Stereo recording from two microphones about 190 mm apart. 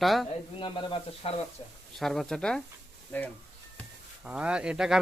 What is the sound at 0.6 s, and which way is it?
Speech, 25° left (ahead or behind).